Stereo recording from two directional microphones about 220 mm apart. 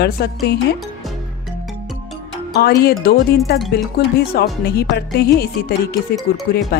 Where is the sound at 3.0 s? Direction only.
40° left (ahead or behind).